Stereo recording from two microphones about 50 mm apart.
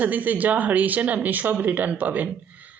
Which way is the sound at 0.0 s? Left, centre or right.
Right.